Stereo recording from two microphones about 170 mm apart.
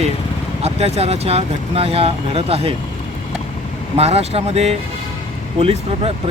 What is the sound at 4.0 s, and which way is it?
Speech, 35° right (ahead or behind).